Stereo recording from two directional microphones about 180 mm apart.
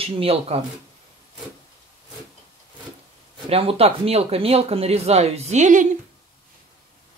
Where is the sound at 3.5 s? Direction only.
35° right (ahead or behind).